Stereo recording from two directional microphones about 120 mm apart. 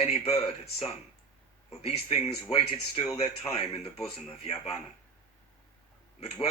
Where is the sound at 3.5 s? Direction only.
60° left (ahead or behind).